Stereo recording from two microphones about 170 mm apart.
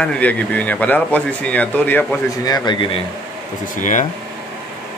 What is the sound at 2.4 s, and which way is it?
Speech, 25° left (ahead or behind).